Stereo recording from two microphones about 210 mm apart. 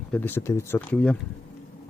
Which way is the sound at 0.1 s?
10° left (ahead or behind).